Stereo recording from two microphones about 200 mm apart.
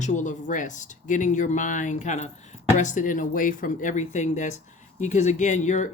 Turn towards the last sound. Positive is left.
turn(degrees=35)  # may be behind; listen again after turning